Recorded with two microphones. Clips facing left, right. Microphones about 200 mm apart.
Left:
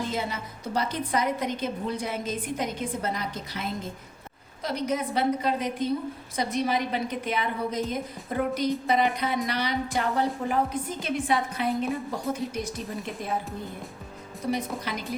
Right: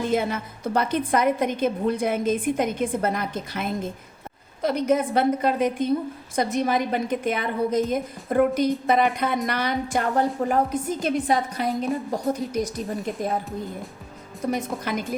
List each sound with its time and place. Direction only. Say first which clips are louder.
0.0 s a woman's voice: right 7 dB; 55° right (ahead or behind)
14.5 s a woman's voice: right 3 dB; 50° right (ahead or behind)